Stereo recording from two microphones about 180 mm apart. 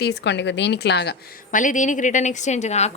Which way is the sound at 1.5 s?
45° left (ahead or behind).